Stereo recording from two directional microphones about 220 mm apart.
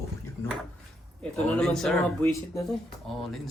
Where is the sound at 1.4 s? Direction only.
5° left (ahead or behind).